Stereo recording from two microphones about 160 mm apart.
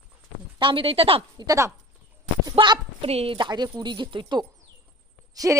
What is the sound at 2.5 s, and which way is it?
Speech, 35° right (ahead or behind).